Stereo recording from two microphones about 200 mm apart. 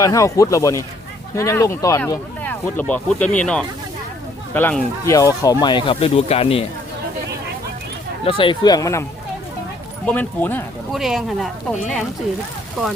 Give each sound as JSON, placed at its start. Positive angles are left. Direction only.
{"t": 0.0, "sound": "speech", "side_deg": 15}
{"t": 8.2, "sound": "speech", "side_deg": 25}
{"t": 10.1, "sound": "speech", "side_deg": 10}
{"t": 10.9, "sound": "speech", "side_deg": 0}